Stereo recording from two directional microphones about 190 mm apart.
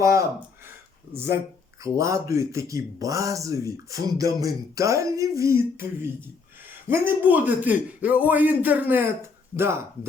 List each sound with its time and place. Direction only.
0.0 s speech: 15° right (ahead or behind)